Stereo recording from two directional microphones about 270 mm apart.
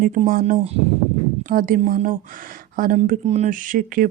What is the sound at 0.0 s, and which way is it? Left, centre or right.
Speech, right.